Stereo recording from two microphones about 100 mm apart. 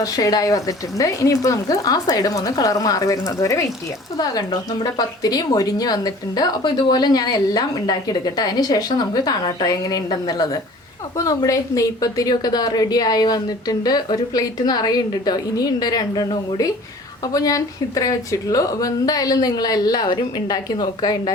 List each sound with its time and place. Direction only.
0.0 s a woman's voice: 40° left (ahead or behind)